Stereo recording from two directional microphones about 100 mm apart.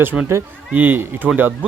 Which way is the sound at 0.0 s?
15° right (ahead or behind).